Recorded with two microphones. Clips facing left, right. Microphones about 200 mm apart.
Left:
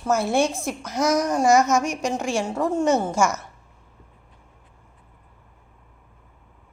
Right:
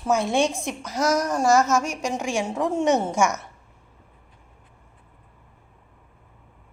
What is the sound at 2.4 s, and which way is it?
Speech, centre (ahead or behind).